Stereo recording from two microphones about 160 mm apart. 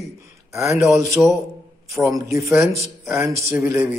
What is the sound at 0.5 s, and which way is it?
Mantra, 20° right (ahead or behind).